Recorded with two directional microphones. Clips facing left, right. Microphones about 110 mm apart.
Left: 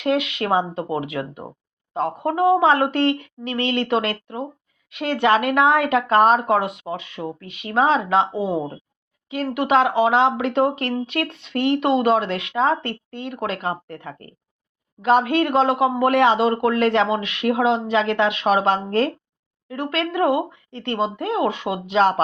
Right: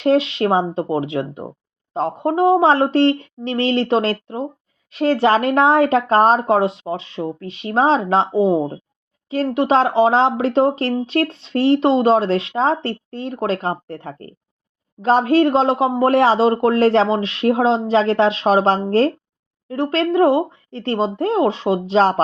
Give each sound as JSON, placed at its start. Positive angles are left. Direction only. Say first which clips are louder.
{"t": 0.0, "sound": "speech", "louder": "right 6 dB", "side_deg": -30}